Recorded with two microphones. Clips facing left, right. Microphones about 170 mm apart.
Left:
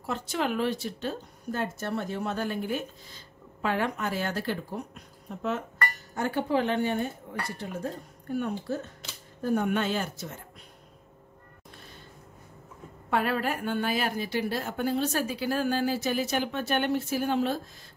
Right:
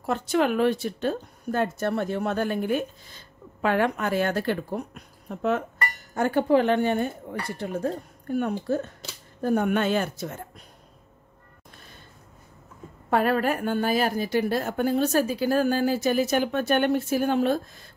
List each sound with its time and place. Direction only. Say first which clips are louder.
0.0 s speech: right 7 dB; 55° right (ahead or behind)
6.1 s speech: right 6 dB; 55° right (ahead or behind)
13.1 s a woman's voice: right 5 dB; 45° right (ahead or behind)